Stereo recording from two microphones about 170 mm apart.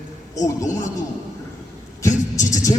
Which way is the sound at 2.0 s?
20° left (ahead or behind).